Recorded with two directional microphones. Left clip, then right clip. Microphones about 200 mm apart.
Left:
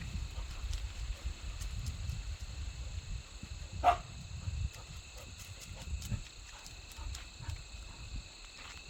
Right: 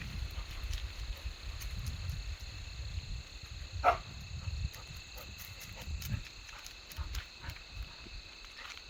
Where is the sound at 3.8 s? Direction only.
60° left (ahead or behind).